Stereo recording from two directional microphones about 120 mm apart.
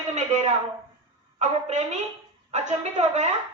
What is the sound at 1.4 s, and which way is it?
A woman's voice, 70° right (ahead or behind).